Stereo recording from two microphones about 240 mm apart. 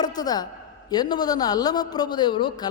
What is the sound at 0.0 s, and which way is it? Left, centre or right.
A man's voice, centre.